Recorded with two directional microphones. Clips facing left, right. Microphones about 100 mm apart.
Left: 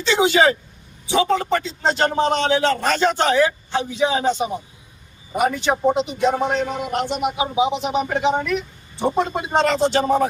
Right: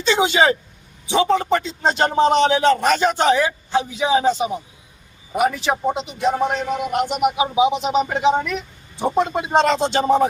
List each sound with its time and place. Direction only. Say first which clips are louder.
0.1 s a man's voice: even; 20° right (ahead or behind)